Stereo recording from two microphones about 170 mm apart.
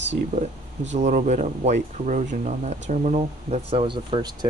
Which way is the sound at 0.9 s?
45° right (ahead or behind).